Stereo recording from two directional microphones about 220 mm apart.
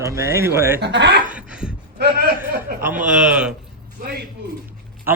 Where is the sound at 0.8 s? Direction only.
50° right (ahead or behind).